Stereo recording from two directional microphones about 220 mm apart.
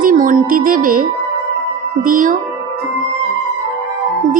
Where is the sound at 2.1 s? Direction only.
40° right (ahead or behind).